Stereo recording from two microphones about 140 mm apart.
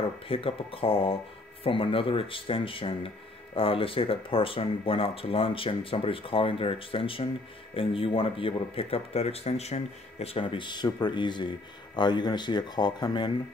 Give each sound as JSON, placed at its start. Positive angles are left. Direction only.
{"t": 0.3, "sound": "speech", "side_deg": 40}